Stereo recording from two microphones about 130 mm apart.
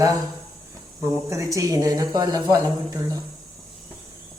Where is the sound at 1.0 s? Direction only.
25° right (ahead or behind).